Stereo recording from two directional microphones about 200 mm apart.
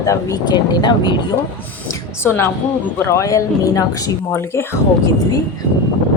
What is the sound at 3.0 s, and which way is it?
Speech, 15° left (ahead or behind).